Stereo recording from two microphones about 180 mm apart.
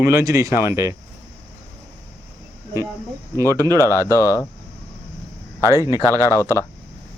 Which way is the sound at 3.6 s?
20° right (ahead or behind).